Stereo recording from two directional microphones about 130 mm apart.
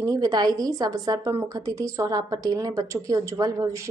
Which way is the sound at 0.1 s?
30° right (ahead or behind).